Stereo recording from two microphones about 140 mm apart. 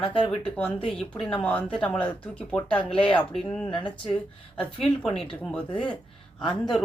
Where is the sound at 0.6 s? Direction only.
5° left (ahead or behind).